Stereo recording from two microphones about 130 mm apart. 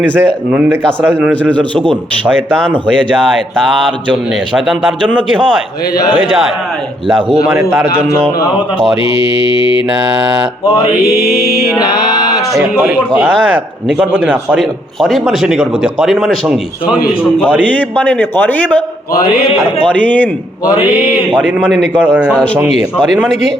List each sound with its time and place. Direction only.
0.0 s speech: 15° right (ahead or behind)
2.5 s speech: 5° left (ahead or behind)
7.4 s a man's voice: 20° right (ahead or behind)
11.3 s speech: centre (ahead or behind)
11.8 s mantra: 30° left (ahead or behind)
13.8 s speech: 10° right (ahead or behind)
14.6 s speech: centre (ahead or behind)
17.7 s speech: 10° left (ahead or behind)
19.8 s speech: 10° left (ahead or behind)
21.9 s speech: 15° right (ahead or behind)